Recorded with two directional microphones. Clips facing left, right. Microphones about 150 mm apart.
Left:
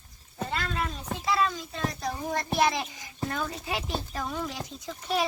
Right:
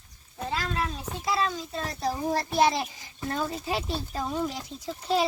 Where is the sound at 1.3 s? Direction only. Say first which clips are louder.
Even; 30° right (ahead or behind).